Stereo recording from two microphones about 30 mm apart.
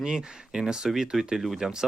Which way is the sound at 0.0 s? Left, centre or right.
Right.